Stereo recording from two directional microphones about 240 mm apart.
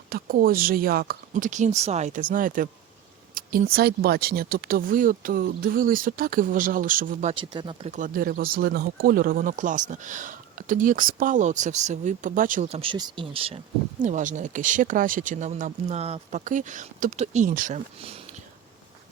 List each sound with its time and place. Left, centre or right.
0.1 s speech: right